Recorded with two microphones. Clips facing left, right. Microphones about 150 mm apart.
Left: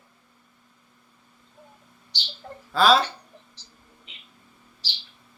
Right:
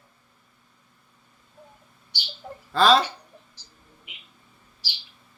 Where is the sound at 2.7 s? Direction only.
5° left (ahead or behind).